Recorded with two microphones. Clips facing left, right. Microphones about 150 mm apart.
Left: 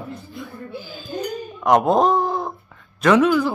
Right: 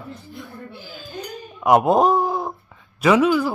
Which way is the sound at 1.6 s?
5° right (ahead or behind).